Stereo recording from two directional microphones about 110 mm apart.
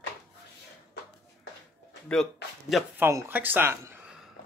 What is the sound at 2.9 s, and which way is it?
Speech, 20° right (ahead or behind).